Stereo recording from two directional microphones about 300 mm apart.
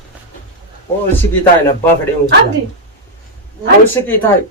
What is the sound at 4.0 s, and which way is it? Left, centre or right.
Speech, centre.